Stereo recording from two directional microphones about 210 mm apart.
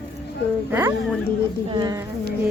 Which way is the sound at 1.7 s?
15° right (ahead or behind).